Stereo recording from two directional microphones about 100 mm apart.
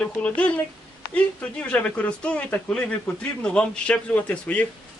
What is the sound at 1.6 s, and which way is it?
Speech, 15° left (ahead or behind).